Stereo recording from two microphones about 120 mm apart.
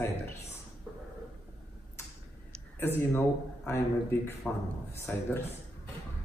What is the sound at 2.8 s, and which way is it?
A man's voice, 20° left (ahead or behind).